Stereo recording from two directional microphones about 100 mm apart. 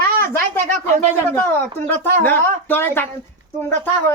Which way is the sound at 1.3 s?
20° left (ahead or behind).